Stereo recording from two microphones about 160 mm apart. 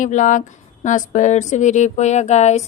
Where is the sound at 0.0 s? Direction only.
50° left (ahead or behind).